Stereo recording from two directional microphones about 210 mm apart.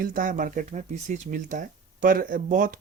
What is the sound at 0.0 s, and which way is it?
Speech, 40° right (ahead or behind).